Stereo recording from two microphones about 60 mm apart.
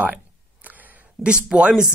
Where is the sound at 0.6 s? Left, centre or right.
Right.